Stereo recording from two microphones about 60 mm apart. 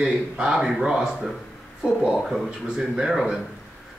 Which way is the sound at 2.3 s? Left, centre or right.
Centre.